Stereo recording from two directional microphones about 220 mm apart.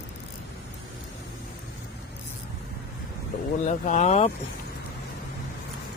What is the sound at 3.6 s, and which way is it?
Speech, 30° left (ahead or behind).